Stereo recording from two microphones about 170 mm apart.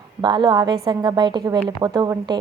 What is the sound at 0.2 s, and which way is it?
A woman's voice, 25° right (ahead or behind).